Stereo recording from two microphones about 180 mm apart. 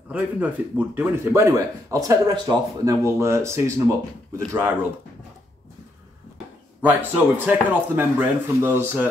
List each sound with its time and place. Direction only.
0.1 s a man's voice: 10° right (ahead or behind)
6.8 s a man's voice: 10° right (ahead or behind)